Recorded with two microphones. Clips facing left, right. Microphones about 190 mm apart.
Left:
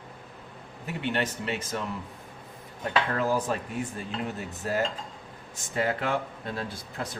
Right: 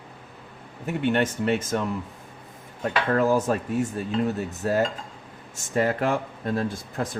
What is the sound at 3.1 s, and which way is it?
Speech, 45° right (ahead or behind).